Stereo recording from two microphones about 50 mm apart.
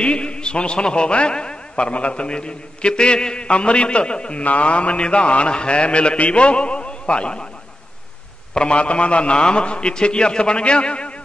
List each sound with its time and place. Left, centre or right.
0.0 s a man's voice: left
8.5 s a man's voice: left